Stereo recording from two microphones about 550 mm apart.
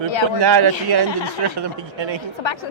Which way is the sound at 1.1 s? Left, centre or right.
Left.